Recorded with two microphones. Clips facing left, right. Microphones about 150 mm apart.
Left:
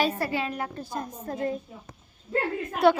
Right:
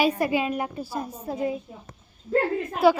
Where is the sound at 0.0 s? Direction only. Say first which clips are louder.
Right 4 dB; 15° right (ahead or behind).